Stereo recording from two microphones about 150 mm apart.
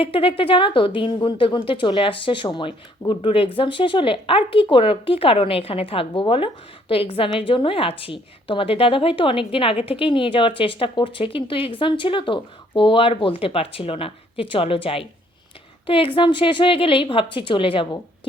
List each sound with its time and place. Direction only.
0.0 s a woman's voice: 40° left (ahead or behind)